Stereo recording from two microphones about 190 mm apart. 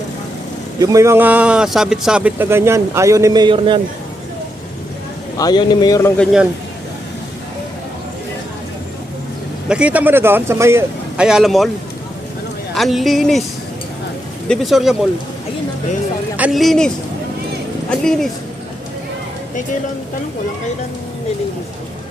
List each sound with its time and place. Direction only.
0.8 s speech: 15° right (ahead or behind)
5.4 s speech: 20° left (ahead or behind)
9.6 s speech: 5° right (ahead or behind)
12.7 s speech: centre (ahead or behind)
14.4 s speech: centre (ahead or behind)
16.4 s speech: centre (ahead or behind)
18.0 s speech: centre (ahead or behind)